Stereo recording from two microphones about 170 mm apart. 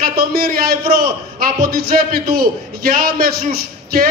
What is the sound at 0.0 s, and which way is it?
A man's voice, 60° right (ahead or behind).